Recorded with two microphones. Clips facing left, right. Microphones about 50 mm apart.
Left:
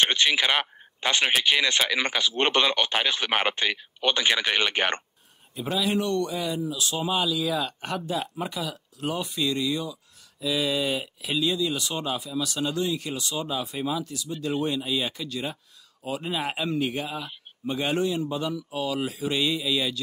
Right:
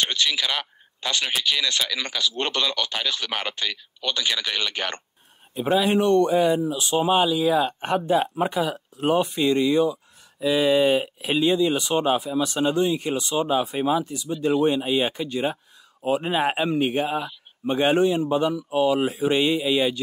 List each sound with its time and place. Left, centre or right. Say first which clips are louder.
0.0 s speech: left 2 dB; left
5.5 s speech: right 6 dB; right